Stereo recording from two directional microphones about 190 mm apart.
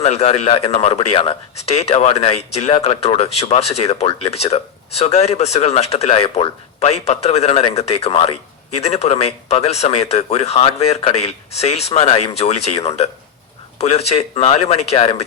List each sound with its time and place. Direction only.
0.0 s speech: 35° left (ahead or behind)